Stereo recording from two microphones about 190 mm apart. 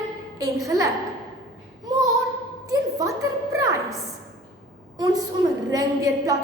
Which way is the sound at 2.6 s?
15° right (ahead or behind).